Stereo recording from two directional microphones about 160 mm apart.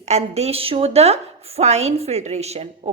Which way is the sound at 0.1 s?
40° right (ahead or behind).